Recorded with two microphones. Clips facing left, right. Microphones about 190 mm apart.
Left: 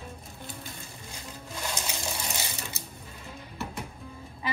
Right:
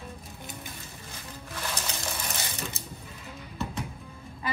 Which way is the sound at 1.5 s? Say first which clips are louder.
Even; 15° left (ahead or behind).